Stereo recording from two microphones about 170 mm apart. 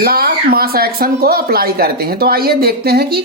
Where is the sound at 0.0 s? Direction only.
65° right (ahead or behind).